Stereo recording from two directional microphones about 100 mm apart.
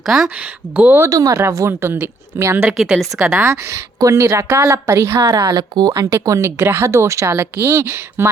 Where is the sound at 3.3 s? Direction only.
30° right (ahead or behind).